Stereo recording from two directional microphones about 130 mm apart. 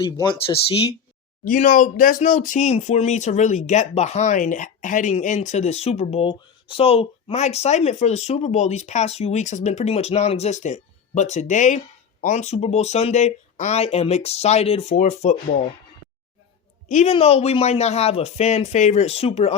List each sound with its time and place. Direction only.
0.0 s speech: 40° left (ahead or behind)
1.5 s speech: 75° left (ahead or behind)
16.9 s speech: 55° left (ahead or behind)